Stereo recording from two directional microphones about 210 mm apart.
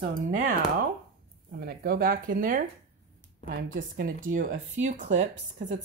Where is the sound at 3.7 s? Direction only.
45° right (ahead or behind).